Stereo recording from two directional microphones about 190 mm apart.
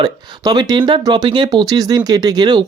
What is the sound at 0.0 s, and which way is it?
Speech, 20° right (ahead or behind).